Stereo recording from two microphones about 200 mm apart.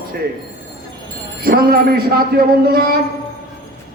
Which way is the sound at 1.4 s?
45° right (ahead or behind).